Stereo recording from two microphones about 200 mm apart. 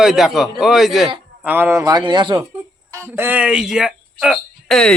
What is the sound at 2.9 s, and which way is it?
Speech, 10° right (ahead or behind).